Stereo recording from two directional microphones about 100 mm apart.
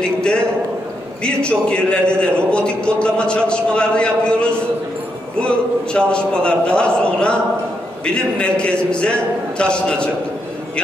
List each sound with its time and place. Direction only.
0.0 s a sound: 10° left (ahead or behind)
1.2 s a man's voice: 10° left (ahead or behind)
5.9 s a man's voice: 10° left (ahead or behind)